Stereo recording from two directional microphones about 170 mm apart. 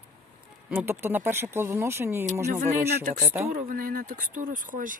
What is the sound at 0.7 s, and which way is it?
Speech, 10° right (ahead or behind).